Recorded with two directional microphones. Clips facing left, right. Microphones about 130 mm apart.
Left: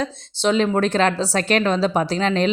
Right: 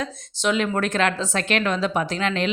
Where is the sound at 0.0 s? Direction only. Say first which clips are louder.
Left 4 dB; 30° left (ahead or behind).